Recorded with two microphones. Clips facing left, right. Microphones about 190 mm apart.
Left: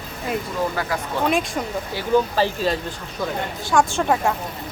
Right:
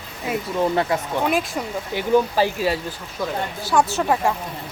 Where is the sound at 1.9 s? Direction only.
15° right (ahead or behind).